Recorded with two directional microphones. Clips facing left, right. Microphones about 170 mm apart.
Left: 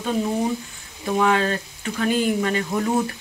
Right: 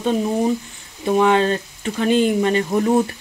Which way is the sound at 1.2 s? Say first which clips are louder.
Right 4 dB; 25° right (ahead or behind).